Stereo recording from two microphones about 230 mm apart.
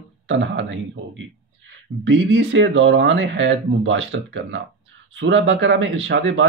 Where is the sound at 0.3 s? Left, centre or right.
Right.